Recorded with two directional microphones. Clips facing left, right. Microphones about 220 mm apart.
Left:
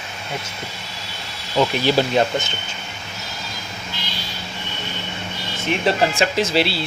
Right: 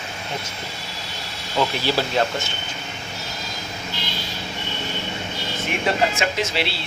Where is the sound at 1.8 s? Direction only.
20° left (ahead or behind).